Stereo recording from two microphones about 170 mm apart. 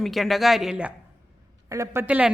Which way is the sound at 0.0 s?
Centre (ahead or behind).